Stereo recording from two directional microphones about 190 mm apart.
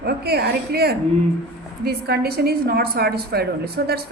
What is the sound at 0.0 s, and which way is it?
A woman's voice, 55° right (ahead or behind).